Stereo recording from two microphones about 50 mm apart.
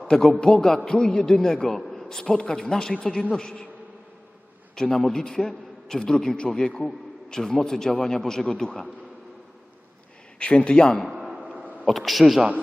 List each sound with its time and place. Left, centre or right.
0.1 s a man's voice: centre
4.7 s a man's voice: centre
10.3 s speech: left
11.4 s a sound: right
11.9 s a man's voice: centre